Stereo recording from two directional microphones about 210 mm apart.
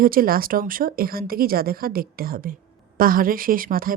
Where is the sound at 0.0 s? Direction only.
45° right (ahead or behind).